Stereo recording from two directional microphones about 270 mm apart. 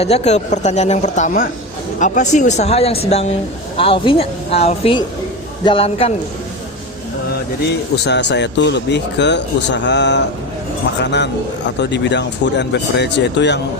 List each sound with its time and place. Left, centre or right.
0.0 s speech: left
7.9 s speech: left